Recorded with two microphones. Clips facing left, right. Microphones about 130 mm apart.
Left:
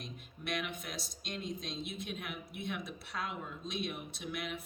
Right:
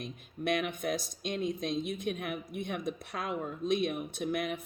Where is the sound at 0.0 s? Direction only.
55° right (ahead or behind).